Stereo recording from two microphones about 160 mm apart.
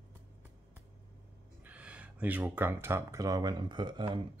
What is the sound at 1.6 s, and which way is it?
Speech, 10° right (ahead or behind).